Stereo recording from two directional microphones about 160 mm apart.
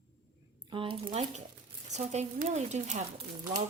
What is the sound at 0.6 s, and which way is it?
Speech, 30° right (ahead or behind).